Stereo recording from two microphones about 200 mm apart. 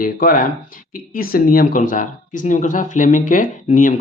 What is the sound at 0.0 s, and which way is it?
Speech, 45° left (ahead or behind).